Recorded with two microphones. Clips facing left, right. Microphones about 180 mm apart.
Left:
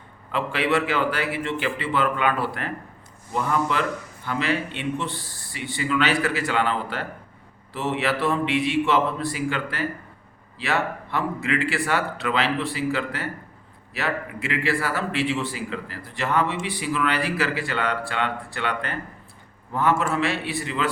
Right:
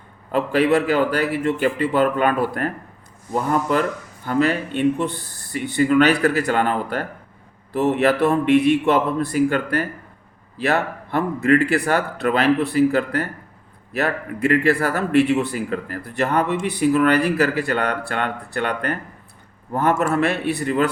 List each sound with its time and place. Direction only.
0.3 s speech: 45° right (ahead or behind)